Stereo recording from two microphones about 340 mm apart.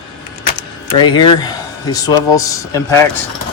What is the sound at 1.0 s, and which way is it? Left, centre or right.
Speech, centre.